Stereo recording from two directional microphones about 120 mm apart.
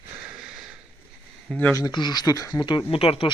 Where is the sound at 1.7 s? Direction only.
35° left (ahead or behind); by 3.3 s 50° left (ahead or behind).